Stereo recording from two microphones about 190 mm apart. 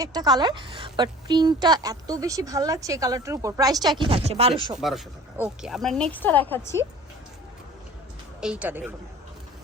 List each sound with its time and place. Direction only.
0.0 s a woman's voice: 20° right (ahead or behind)
4.8 s speech: centre (ahead or behind)
8.4 s a woman's voice: 5° right (ahead or behind)